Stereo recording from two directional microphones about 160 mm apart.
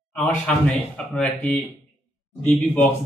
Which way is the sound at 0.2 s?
5° left (ahead or behind).